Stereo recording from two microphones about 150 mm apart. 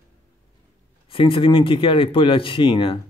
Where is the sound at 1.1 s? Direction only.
35° left (ahead or behind).